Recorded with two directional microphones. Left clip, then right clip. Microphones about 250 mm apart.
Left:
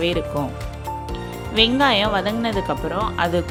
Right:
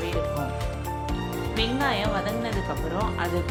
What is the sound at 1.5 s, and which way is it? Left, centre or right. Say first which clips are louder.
Speech: left 10 dB; left.